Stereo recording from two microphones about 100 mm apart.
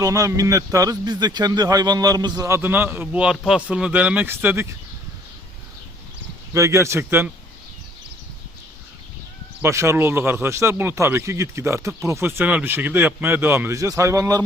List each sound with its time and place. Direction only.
0.0 s a man's voice: 30° right (ahead or behind)
6.5 s speech: 30° right (ahead or behind)
9.6 s speech: 30° right (ahead or behind)